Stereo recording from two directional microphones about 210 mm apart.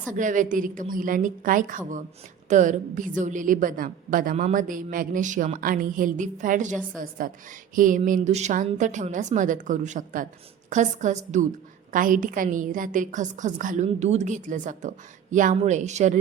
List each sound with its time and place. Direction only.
0.1 s a woman's voice: 35° right (ahead or behind)